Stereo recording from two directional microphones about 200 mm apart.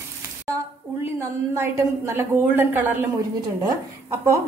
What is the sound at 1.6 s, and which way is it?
A woman's voice, 10° right (ahead or behind).